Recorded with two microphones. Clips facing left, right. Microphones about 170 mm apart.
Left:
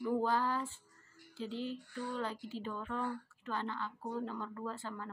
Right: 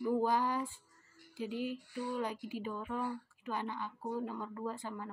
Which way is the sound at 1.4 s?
10° right (ahead or behind).